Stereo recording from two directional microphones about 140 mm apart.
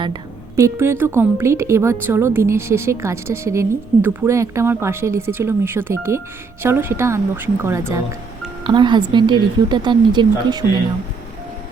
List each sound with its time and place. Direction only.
0.0 s a woman's voice: 25° right (ahead or behind)
8.6 s a woman's voice: 35° right (ahead or behind)